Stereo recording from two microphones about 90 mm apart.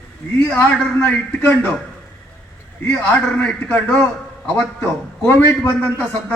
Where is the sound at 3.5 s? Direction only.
15° left (ahead or behind).